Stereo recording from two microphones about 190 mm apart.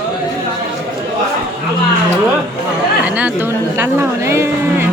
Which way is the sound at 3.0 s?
10° right (ahead or behind).